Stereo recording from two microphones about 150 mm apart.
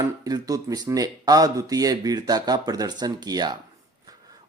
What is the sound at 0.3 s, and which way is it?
Speech, 25° right (ahead or behind).